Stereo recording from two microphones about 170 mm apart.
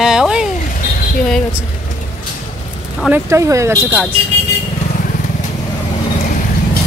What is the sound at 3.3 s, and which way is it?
Speech, 15° right (ahead or behind).